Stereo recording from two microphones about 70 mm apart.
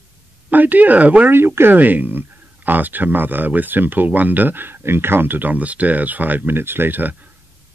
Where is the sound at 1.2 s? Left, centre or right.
Right.